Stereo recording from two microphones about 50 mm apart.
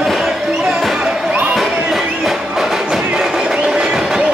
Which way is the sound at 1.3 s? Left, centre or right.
Right.